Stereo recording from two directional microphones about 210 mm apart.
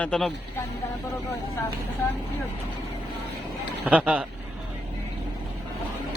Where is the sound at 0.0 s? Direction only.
5° left (ahead or behind).